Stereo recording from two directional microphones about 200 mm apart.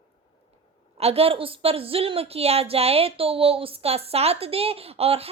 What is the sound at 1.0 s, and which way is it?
A woman's voice, 30° right (ahead or behind).